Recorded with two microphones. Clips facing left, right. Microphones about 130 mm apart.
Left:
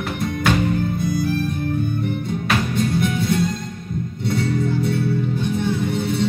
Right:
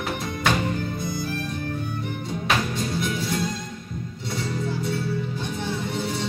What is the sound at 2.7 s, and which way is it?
Music, 55° left (ahead or behind).